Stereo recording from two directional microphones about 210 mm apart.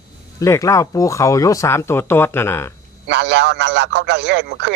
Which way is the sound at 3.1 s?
55° right (ahead or behind).